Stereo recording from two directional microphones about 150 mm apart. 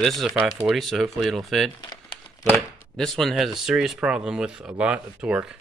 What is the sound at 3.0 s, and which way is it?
Speech, centre (ahead or behind).